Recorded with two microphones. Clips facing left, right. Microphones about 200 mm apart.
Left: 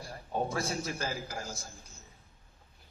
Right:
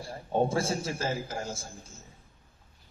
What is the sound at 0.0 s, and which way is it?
A man's voice, 25° right (ahead or behind).